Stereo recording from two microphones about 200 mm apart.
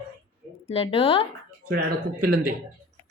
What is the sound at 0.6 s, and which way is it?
Speech, 30° left (ahead or behind).